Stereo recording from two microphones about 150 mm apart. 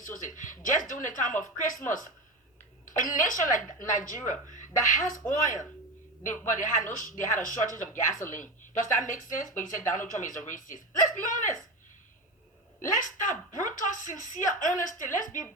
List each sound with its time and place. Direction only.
0.0 s speech: 60° left (ahead or behind)
2.8 s a woman's voice: 65° left (ahead or behind)
12.8 s speech: 60° left (ahead or behind)